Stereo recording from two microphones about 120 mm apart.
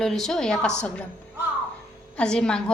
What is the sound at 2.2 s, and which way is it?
Speech, 5° left (ahead or behind).